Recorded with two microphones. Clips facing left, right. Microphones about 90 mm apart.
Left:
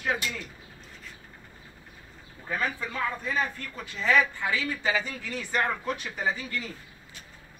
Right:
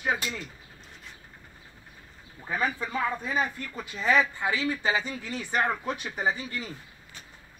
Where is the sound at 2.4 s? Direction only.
10° right (ahead or behind).